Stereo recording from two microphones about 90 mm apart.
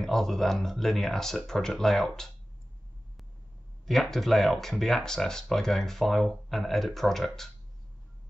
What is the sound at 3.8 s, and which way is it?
Speech, centre (ahead or behind).